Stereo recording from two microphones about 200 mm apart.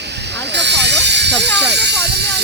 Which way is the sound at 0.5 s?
60° right (ahead or behind).